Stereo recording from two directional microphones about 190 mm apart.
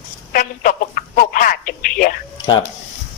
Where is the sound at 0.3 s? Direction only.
45° left (ahead or behind).